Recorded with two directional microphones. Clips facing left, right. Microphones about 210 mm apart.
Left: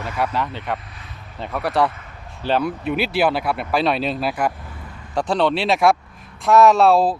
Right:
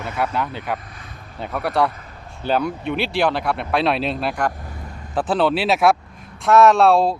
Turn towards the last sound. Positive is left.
turn(degrees=0)  # may be behind; listen again after turning